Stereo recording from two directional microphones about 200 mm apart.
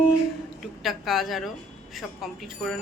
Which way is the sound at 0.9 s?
Centre (ahead or behind).